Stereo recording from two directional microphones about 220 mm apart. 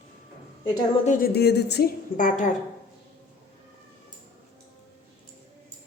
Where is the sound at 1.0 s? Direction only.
40° left (ahead or behind).